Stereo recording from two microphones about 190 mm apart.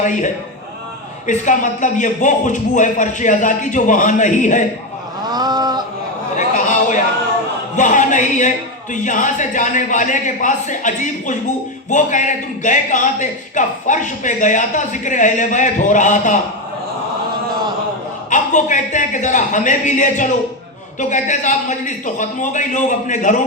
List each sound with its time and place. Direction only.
0.0 s a man's voice: 40° left (ahead or behind)
1.3 s a man's voice: 40° left (ahead or behind)
5.3 s a sound: 20° right (ahead or behind)
6.3 s a sound: 40° left (ahead or behind)
7.8 s a man's voice: 40° left (ahead or behind)
18.3 s a man's voice: 40° left (ahead or behind)